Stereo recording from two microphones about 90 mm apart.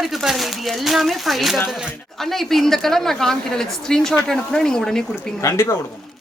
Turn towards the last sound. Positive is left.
turn(degrees=30)  # may be behind; listen again after turning